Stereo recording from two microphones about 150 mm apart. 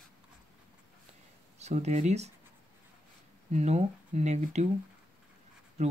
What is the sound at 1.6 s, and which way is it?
Speech, 50° right (ahead or behind).